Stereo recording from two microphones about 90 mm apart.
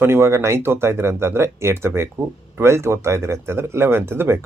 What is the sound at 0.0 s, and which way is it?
Speech, 30° right (ahead or behind).